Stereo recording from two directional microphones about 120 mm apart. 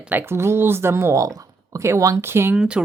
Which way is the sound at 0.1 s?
20° right (ahead or behind).